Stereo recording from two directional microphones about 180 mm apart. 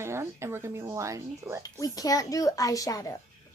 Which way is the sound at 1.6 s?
20° left (ahead or behind).